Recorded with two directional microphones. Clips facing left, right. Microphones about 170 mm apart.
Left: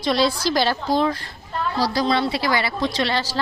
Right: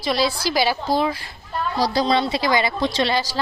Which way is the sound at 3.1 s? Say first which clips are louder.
Right 1 dB; 15° right (ahead or behind).